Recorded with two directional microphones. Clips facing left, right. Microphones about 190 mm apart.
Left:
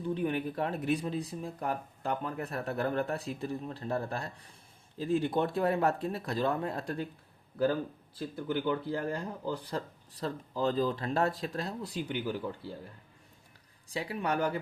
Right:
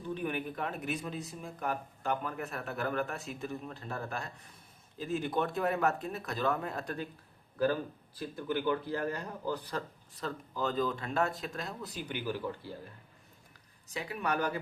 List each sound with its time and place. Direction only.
0.1 s speech: 30° left (ahead or behind)
8.4 s speech: 20° left (ahead or behind)
13.9 s speech: 30° left (ahead or behind)